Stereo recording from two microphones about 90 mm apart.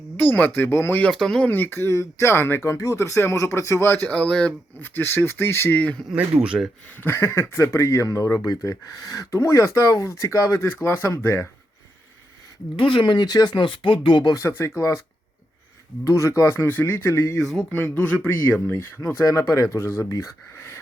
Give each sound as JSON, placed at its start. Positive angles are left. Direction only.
{"t": 0.2, "sound": "speech", "side_deg": 20}
{"t": 1.1, "sound": "speech", "side_deg": 5}
{"t": 1.5, "sound": "speech", "side_deg": 20}
{"t": 4.1, "sound": "speech", "side_deg": 10}
{"t": 6.1, "sound": "speech", "side_deg": -15}
{"t": 7.0, "sound": "speech", "side_deg": 30}
{"t": 12.7, "sound": "speech", "side_deg": 65}
{"t": 14.3, "sound": "speech", "side_deg": 30}
{"t": 16.0, "sound": "speech", "side_deg": 35}
{"t": 17.4, "sound": "speech", "side_deg": 0}
{"t": 17.9, "sound": "speech", "side_deg": 15}
{"t": 19.2, "sound": "speech", "side_deg": 40}